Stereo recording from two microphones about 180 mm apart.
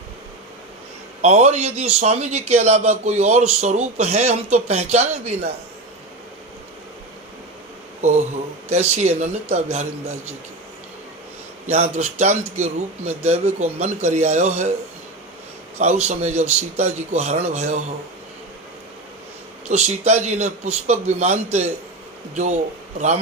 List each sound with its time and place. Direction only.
1.2 s a man's voice: 40° right (ahead or behind)
8.7 s a man's voice: 35° right (ahead or behind)
11.6 s a man's voice: 40° right (ahead or behind)
15.8 s a man's voice: 40° right (ahead or behind)
19.6 s a man's voice: 40° right (ahead or behind)